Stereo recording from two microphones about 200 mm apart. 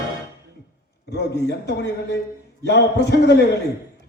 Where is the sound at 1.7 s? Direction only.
55° left (ahead or behind).